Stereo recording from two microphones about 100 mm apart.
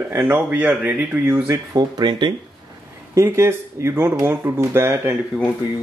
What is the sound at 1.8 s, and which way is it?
Speech, 45° right (ahead or behind).